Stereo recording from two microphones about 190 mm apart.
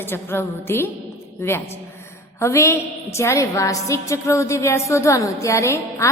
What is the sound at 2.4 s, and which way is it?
A woman's voice, 15° left (ahead or behind).